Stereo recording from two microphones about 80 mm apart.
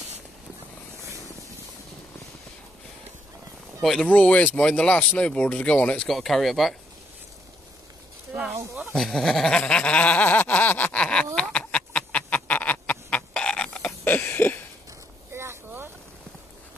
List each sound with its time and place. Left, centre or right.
3.8 s speech: centre
4.1 s speech: centre
6.0 s speech: centre
8.9 s speech: centre
9.6 s a sound: centre
11.3 s duck: centre
14.0 s a sound: left
15.3 s vehicle: right